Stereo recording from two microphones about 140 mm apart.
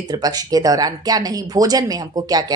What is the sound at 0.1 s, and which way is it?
A woman's voice, 25° right (ahead or behind).